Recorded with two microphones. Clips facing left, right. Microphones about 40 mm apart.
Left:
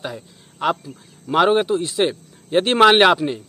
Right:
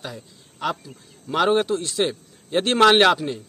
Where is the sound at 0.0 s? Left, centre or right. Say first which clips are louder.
Left 5 dB; centre.